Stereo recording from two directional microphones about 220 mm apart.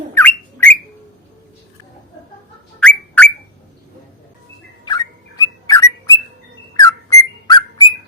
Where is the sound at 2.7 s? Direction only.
5° left (ahead or behind).